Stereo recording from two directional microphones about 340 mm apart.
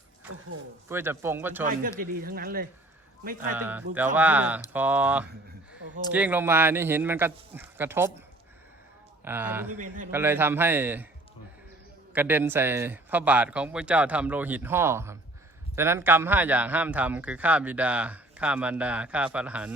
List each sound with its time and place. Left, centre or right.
0.9 s speech: centre
1.6 s a man's voice: right
3.5 s a man's voice: centre
9.2 s a man's voice: centre
9.7 s a man's voice: right
10.1 s speech: centre
12.1 s a man's voice: centre